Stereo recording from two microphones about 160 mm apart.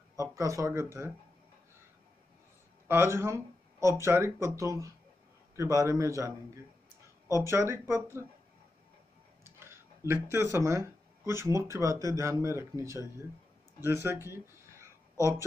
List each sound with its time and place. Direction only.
0.1 s speech: 20° right (ahead or behind)
2.9 s a man's voice: 15° right (ahead or behind)
9.4 s a man's voice: 15° right (ahead or behind)
13.8 s a sound: 15° right (ahead or behind)